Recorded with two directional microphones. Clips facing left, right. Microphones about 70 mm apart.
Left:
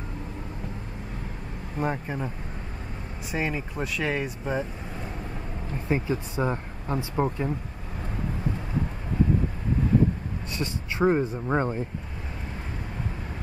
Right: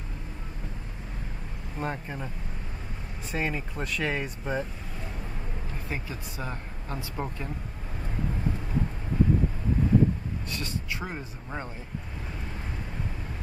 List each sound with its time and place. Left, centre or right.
1.8 s speech: centre
5.9 s speech: left
10.6 s speech: left